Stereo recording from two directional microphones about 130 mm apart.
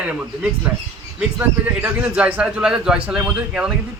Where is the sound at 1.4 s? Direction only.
15° right (ahead or behind).